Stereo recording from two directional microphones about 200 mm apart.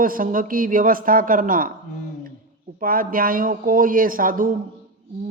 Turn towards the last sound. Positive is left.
turn(degrees=-45)  # may be behind; listen again after turning